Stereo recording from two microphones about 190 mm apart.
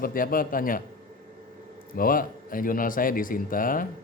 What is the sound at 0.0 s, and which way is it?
Speech, 50° left (ahead or behind).